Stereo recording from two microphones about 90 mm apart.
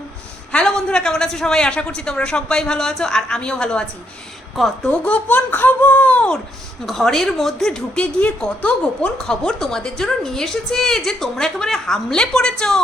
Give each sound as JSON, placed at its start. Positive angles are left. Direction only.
{"t": 0.5, "sound": "a man's voice", "side_deg": 10}
{"t": 4.9, "sound": "a man's voice", "side_deg": 15}